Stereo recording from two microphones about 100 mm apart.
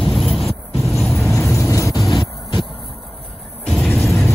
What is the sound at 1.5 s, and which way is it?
Vehicle, 30° left (ahead or behind).